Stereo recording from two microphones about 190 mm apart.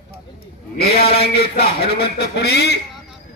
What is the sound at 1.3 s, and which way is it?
Speech, 55° left (ahead or behind).